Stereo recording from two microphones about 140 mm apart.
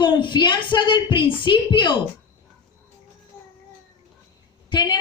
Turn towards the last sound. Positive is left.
turn(degrees=30)  # may be behind; listen again after turning